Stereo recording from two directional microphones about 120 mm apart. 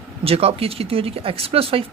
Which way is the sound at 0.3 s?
55° right (ahead or behind).